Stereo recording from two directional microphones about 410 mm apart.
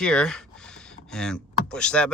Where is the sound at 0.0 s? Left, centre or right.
Centre.